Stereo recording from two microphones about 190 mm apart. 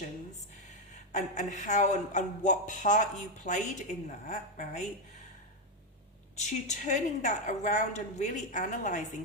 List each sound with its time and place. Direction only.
1.1 s speech: 40° left (ahead or behind)
6.3 s speech: 40° left (ahead or behind)